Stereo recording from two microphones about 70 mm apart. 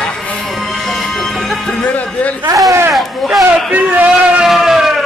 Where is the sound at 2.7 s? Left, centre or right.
Right.